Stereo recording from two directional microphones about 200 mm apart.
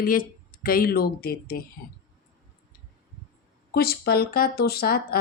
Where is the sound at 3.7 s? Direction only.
50° left (ahead or behind).